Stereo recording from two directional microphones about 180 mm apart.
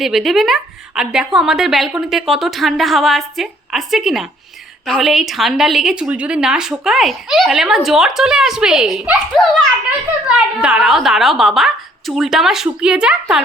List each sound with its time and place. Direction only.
0.0 s a woman's voice: centre (ahead or behind)